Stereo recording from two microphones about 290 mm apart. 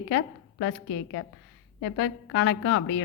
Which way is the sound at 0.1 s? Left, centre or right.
Left.